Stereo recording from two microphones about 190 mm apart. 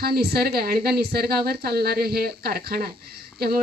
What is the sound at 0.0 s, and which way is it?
Speech, 55° right (ahead or behind).